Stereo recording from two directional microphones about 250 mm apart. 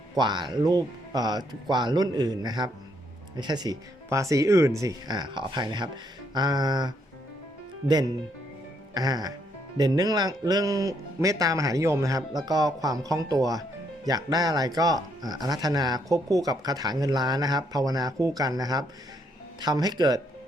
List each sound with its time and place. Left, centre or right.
0.1 s speech: centre